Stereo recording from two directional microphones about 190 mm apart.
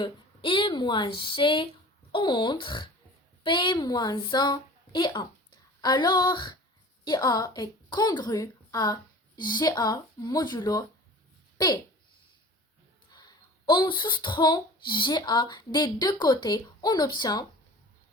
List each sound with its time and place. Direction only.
0.0 s a woman's voice: 25° left (ahead or behind)
13.1 s speech: 20° left (ahead or behind)